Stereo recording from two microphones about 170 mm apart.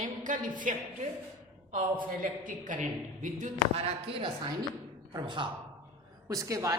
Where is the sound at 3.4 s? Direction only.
35° right (ahead or behind); by 6.7 s 20° right (ahead or behind).